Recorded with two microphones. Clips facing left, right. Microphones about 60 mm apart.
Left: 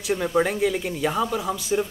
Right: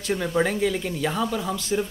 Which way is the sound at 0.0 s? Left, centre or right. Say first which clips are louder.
Left 1 dB; centre.